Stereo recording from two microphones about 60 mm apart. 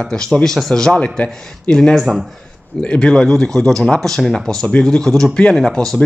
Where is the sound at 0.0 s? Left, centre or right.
Centre.